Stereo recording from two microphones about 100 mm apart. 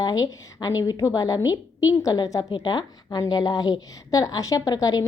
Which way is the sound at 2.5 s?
50° left (ahead or behind).